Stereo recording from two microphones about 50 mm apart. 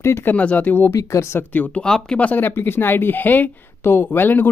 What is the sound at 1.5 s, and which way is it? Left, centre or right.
Speech, left.